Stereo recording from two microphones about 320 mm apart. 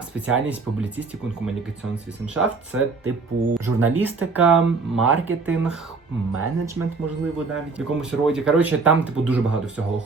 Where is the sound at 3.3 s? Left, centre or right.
Right.